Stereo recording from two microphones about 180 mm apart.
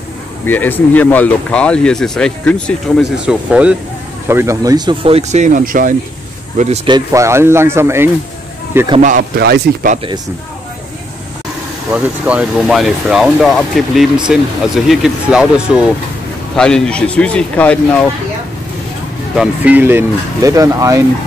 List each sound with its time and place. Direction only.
0.5 s speech: 10° left (ahead or behind); by 5.9 s 50° right (ahead or behind)
6.9 s speech: 15° right (ahead or behind)
9.4 s speech: 60° right (ahead or behind)
11.9 s speech: 5° right (ahead or behind)
19.3 s speech: 5° right (ahead or behind)